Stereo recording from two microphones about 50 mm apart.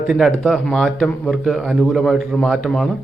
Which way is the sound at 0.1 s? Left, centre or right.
Centre.